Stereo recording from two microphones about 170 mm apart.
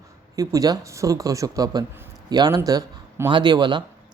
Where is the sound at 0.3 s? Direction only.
20° right (ahead or behind).